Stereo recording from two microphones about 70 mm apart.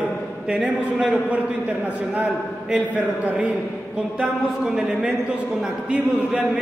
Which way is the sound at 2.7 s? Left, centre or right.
Centre.